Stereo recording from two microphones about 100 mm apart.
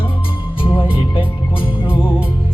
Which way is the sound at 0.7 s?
60° left (ahead or behind).